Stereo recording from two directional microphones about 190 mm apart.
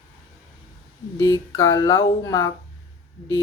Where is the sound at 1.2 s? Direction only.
15° left (ahead or behind).